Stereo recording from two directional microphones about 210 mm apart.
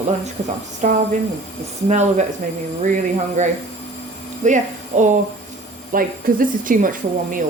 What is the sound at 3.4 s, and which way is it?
Speech, 35° right (ahead or behind).